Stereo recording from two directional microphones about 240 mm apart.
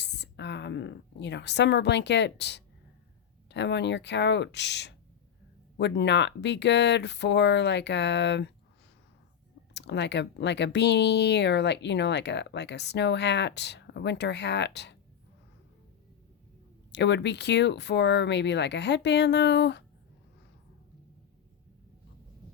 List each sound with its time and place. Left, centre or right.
0.0 s speech: left
9.7 s speech: left
16.9 s speech: left